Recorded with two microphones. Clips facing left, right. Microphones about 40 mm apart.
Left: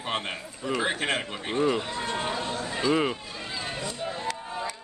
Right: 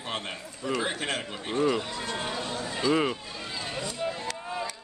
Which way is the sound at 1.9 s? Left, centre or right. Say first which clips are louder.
Left 3 dB; left.